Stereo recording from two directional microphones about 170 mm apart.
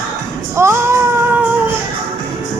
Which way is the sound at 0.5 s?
15° right (ahead or behind).